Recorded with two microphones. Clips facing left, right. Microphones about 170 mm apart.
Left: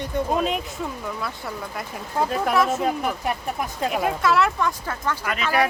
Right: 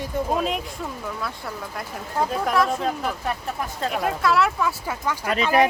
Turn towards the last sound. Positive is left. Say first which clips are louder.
# right 4 dB
turn(degrees=-35)  # may be behind; listen again after turning